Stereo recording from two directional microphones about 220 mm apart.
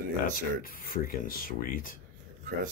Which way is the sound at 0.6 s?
40° left (ahead or behind).